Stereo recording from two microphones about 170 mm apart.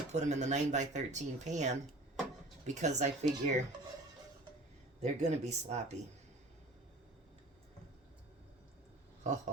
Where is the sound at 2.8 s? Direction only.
45° right (ahead or behind).